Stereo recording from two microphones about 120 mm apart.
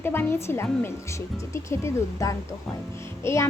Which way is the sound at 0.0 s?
20° left (ahead or behind).